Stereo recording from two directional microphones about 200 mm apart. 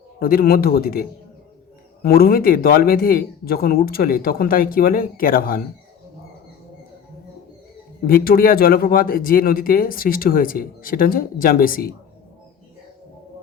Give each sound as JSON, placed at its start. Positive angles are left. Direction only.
{"t": 0.2, "sound": "speech", "side_deg": 50}
{"t": 8.0, "sound": "speech", "side_deg": 45}